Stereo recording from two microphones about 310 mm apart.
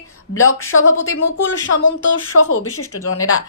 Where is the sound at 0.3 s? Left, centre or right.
Left.